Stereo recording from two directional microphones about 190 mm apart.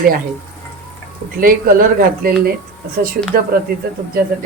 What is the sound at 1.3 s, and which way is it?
Speech, 50° right (ahead or behind).